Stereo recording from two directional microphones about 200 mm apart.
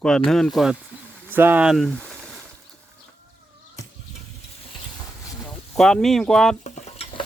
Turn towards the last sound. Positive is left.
turn(degrees=30)  # may be behind; listen again after turning